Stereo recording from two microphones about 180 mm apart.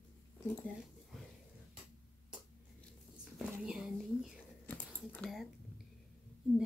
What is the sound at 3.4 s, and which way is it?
Speech, 5° right (ahead or behind).